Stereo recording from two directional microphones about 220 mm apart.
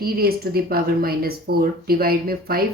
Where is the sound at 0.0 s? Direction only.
45° right (ahead or behind).